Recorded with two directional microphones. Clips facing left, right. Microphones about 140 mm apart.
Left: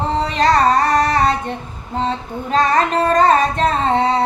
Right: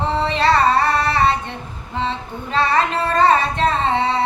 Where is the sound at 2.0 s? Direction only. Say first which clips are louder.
Left 3 dB; 45° left (ahead or behind).